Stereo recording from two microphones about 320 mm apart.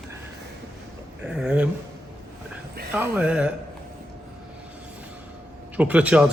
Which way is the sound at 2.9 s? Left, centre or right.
Centre.